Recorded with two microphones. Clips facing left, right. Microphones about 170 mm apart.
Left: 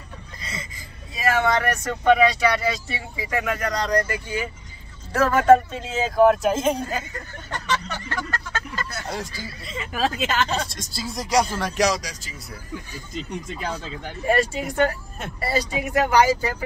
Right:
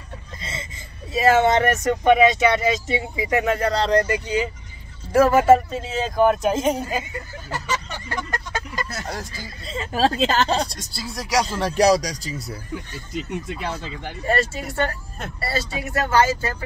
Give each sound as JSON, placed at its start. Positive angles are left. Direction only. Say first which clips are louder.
{"t": 0.4, "sound": "a sound", "louder": "right 1 dB", "side_deg": -25}
{"t": 1.1, "sound": "speech", "louder": "right 5 dB", "side_deg": -25}
{"t": 8.2, "sound": "vehicle", "louder": "right 3 dB", "side_deg": -15}
{"t": 9.3, "sound": "speech", "louder": "right 2 dB", "side_deg": -30}
{"t": 11.0, "sound": "speech", "louder": "left 1 dB", "side_deg": -5}
{"t": 11.6, "sound": "speech", "louder": "right 5 dB", "side_deg": -35}
{"t": 13.1, "sound": "speech", "louder": "right 3 dB", "side_deg": -5}
{"t": 14.2, "sound": "speech", "louder": "left 2 dB", "side_deg": 10}